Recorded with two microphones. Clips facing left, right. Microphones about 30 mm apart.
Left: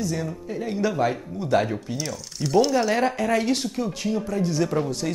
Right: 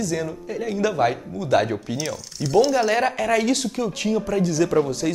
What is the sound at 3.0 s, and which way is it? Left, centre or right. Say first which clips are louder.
Speech: right 1 dB; centre.